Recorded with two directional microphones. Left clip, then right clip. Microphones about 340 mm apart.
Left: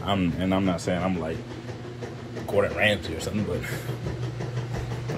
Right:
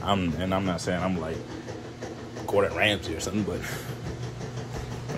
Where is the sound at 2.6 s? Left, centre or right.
Centre.